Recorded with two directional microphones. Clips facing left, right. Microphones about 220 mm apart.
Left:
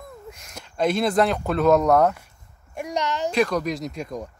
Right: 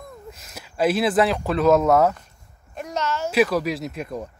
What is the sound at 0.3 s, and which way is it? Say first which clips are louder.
Speech: even; 5° right (ahead or behind).